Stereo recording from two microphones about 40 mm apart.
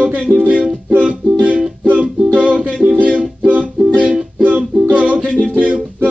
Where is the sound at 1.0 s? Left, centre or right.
Right.